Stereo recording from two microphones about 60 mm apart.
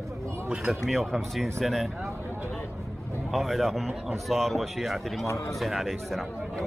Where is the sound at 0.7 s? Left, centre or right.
Centre.